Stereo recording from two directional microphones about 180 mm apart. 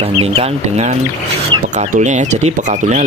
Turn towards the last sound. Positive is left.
turn(degrees=-40)  # may be behind; listen again after turning